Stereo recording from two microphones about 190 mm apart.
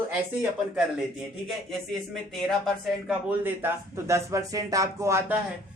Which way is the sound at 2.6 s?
5° right (ahead or behind).